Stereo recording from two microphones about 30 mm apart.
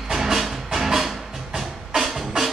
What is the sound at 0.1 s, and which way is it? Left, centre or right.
Music, centre.